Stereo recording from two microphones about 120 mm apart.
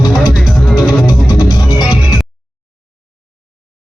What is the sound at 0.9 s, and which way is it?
Music, 30° left (ahead or behind).